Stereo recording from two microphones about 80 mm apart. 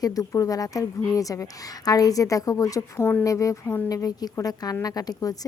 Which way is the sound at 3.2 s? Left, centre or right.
Left.